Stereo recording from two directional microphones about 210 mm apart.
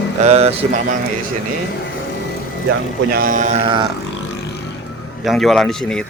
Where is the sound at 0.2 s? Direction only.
30° right (ahead or behind).